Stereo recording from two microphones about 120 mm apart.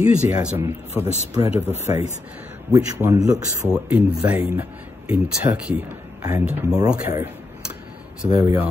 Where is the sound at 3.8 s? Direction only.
15° right (ahead or behind).